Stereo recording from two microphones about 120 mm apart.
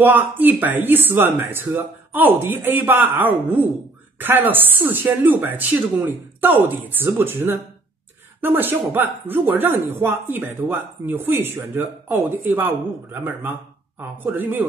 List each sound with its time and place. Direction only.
0.0 s speech: 15° right (ahead or behind)